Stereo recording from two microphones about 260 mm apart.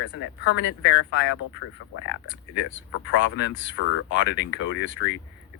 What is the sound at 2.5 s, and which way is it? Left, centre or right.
A man's voice, left.